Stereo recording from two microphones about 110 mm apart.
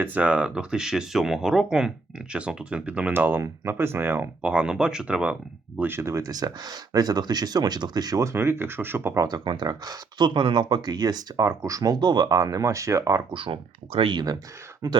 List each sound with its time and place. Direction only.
0.0 s speech: 15° right (ahead or behind)
9.1 s speech: 35° right (ahead or behind)
13.3 s speech: 55° right (ahead or behind); by 15.0 s 35° right (ahead or behind)